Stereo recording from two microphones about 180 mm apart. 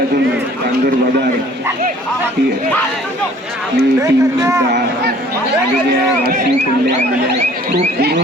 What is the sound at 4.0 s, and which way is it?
Speech, 20° right (ahead or behind).